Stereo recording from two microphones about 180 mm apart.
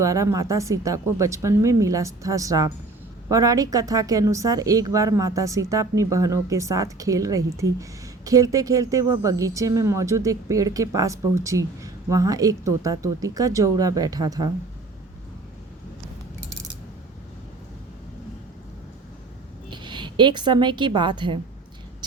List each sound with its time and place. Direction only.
0.0 s a woman's voice: 15° right (ahead or behind)
19.7 s a woman's voice: 25° right (ahead or behind)